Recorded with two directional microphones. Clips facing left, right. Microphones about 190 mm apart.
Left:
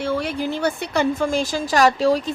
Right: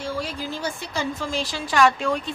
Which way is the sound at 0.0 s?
65° left (ahead or behind).